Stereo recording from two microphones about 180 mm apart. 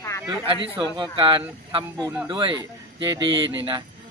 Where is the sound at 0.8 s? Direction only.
25° right (ahead or behind).